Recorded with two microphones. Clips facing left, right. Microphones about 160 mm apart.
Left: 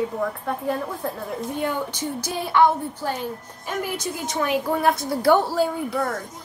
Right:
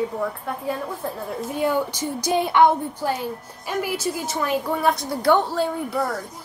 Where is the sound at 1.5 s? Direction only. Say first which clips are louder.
Right 5 dB; 10° right (ahead or behind).